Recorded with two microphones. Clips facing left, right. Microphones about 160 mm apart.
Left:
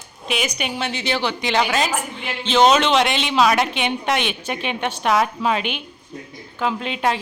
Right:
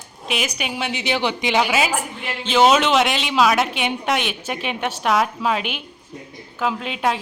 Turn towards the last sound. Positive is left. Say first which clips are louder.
# left 1 dB
turn(degrees=-5)  # may be behind; listen again after turning